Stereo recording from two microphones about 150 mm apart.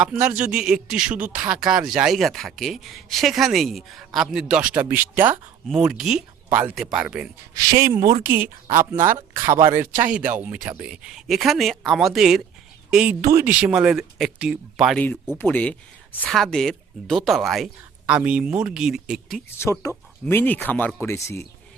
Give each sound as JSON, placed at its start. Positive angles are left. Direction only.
{"t": 0.0, "sound": "speech", "side_deg": -10}
{"t": 7.9, "sound": "speech", "side_deg": -25}
{"t": 14.9, "sound": "speech", "side_deg": 5}
{"t": 19.5, "sound": "speech", "side_deg": 15}